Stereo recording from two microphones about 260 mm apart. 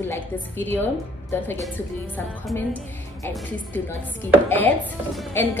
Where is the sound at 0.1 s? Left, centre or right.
Centre.